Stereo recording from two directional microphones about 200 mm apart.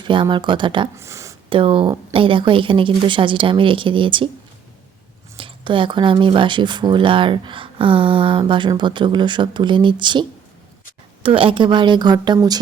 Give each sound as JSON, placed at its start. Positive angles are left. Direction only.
{"t": 0.0, "sound": "speech", "side_deg": -25}
{"t": 0.9, "sound": "a sound", "side_deg": -15}
{"t": 1.5, "sound": "speech", "side_deg": -25}
{"t": 5.4, "sound": "speech", "side_deg": -25}